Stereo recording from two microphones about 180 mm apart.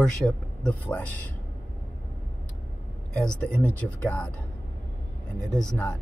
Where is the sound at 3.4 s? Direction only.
5° left (ahead or behind).